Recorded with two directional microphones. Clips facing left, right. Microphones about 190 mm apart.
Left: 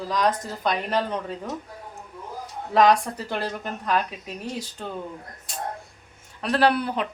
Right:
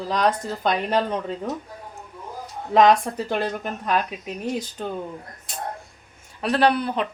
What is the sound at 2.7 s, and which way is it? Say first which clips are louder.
Speech: right 2 dB; 20° right (ahead or behind).